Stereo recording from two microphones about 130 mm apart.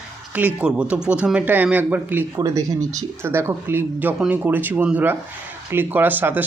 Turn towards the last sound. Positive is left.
turn(degrees=-15)  # may be behind; listen again after turning